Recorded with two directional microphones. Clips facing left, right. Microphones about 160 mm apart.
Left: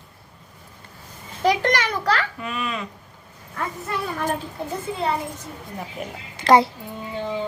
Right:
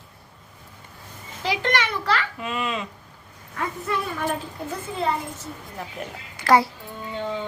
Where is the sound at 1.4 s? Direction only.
40° left (ahead or behind).